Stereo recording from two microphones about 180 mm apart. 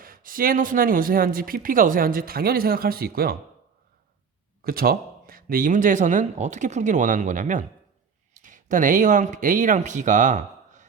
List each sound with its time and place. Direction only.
0.0 s speech: 50° right (ahead or behind)
4.6 s speech: 55° right (ahead or behind)